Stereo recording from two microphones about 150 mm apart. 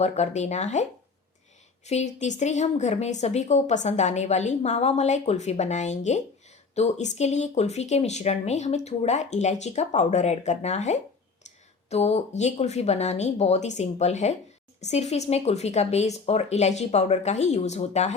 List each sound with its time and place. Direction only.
0.0 s speech: 50° left (ahead or behind)